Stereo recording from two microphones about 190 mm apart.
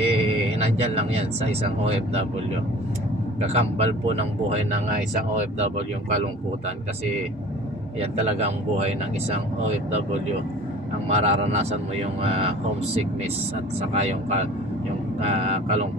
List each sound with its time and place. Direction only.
0.0 s speech: 30° right (ahead or behind)
3.5 s speech: 35° right (ahead or behind)
8.0 s speech: 35° right (ahead or behind)
11.1 s speech: 35° right (ahead or behind)
13.9 s speech: 35° right (ahead or behind)